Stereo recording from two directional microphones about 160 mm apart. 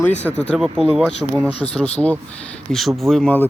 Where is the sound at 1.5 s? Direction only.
40° left (ahead or behind).